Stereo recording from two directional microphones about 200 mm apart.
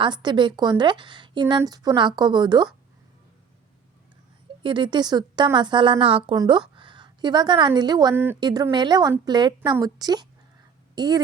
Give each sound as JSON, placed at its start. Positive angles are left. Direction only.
{"t": 0.0, "sound": "a woman's voice", "side_deg": -20}
{"t": 4.6, "sound": "a woman's voice", "side_deg": -25}